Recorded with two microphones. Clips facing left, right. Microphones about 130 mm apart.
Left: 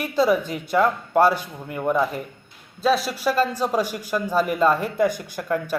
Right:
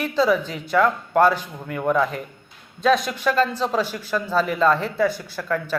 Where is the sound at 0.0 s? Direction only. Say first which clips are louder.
Even; 10° left (ahead or behind).